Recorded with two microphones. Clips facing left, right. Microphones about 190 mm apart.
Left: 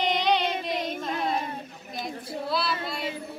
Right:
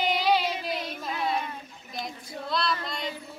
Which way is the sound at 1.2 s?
45° left (ahead or behind).